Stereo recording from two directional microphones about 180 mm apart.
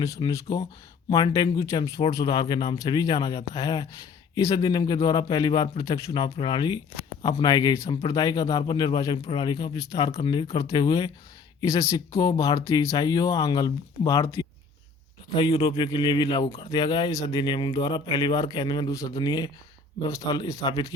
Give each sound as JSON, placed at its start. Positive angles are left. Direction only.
{"t": 0.0, "sound": "speech", "side_deg": 20}